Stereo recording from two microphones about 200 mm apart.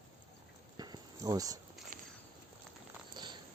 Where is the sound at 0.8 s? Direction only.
20° right (ahead or behind).